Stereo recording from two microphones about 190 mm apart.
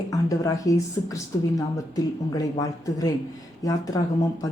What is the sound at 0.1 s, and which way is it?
A woman's voice, 20° left (ahead or behind).